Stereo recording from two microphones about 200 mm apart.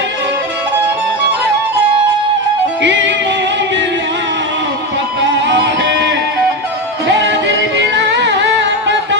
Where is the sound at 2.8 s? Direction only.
65° right (ahead or behind).